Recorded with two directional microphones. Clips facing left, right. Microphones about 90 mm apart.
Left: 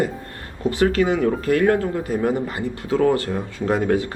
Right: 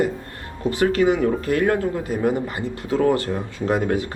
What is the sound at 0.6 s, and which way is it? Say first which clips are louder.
Speech: left 1 dB; 20° left (ahead or behind).